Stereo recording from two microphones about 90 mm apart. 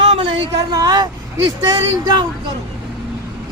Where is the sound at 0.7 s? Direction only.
50° right (ahead or behind).